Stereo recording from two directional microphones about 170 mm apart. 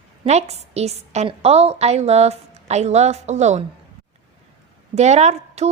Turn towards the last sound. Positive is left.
turn(degrees=-40)  # may be behind; listen again after turning